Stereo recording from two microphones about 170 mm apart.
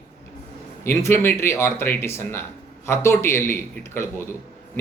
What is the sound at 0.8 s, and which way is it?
A man's voice, 15° left (ahead or behind).